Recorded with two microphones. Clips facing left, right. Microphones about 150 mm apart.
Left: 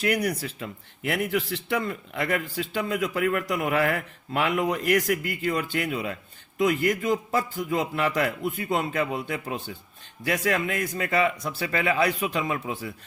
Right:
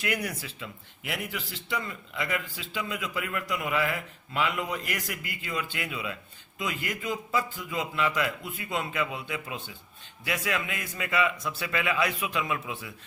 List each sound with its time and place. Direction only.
0.3 s a man's voice: 45° left (ahead or behind)